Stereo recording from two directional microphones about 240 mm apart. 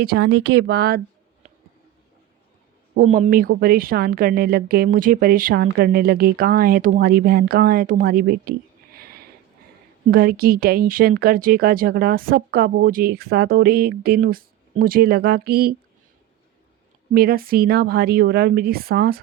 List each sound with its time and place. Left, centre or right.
0.0 s speech: right
2.9 s a woman's voice: right
17.2 s a woman's voice: right